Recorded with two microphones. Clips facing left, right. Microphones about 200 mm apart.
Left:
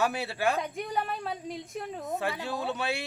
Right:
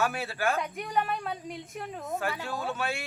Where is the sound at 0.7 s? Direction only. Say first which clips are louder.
Right 2 dB; 30° left (ahead or behind).